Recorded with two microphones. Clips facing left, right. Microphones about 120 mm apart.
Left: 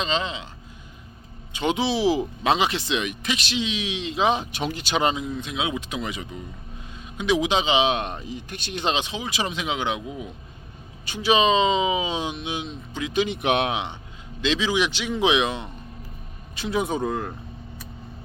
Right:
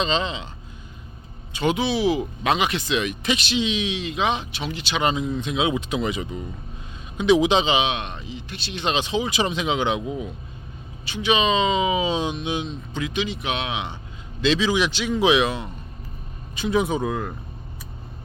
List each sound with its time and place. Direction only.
0.0 s speech: 5° left (ahead or behind)
1.5 s speech: 25° left (ahead or behind)
3.2 s speech: centre (ahead or behind)
3.9 s speech: 25° left (ahead or behind); by 5.0 s 45° left (ahead or behind)
5.1 s speech: 5° left (ahead or behind)
7.8 s speech: 40° left (ahead or behind)
9.0 s speech: centre (ahead or behind)
11.0 s speech: 40° left (ahead or behind); by 13.1 s 10° left (ahead or behind)
13.1 s speech: 60° left (ahead or behind)
14.4 s a man's voice: 15° left (ahead or behind)
16.6 s speech: centre (ahead or behind)